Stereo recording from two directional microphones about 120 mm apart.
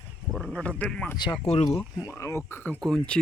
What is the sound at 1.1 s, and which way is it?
Speech, 40° left (ahead or behind).